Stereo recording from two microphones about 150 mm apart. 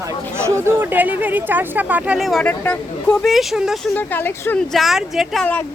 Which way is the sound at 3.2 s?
Centre (ahead or behind).